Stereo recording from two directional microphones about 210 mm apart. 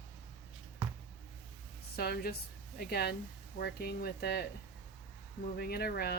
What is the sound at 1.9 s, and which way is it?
Speech, 50° left (ahead or behind).